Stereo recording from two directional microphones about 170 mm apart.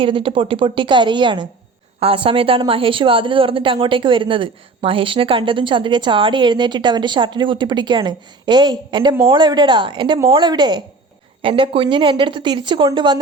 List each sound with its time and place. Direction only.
0.0 s a woman's voice: 30° right (ahead or behind)